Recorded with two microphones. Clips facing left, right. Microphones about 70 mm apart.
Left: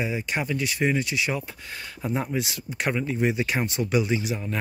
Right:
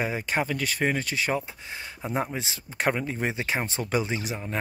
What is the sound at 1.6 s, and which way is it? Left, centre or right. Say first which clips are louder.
Speech: left 2 dB; centre.